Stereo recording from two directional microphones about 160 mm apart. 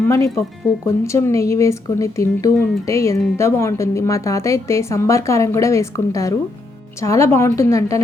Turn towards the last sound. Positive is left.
turn(degrees=20)  # may be behind; listen again after turning